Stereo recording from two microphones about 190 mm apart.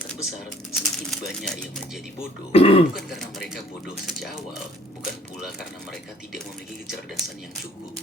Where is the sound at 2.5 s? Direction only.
30° left (ahead or behind).